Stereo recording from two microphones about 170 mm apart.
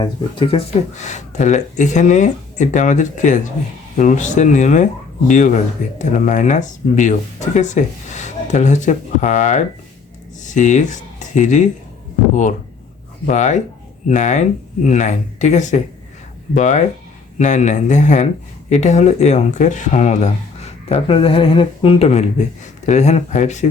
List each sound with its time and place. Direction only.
0.0 s speech: 30° left (ahead or behind)
13.2 s speech: 45° left (ahead or behind)